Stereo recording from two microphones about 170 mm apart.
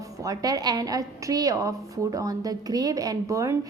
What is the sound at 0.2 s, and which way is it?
A woman's voice, 20° right (ahead or behind).